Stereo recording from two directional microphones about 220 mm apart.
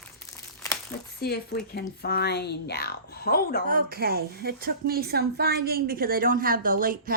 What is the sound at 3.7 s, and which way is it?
A woman's voice, 40° right (ahead or behind).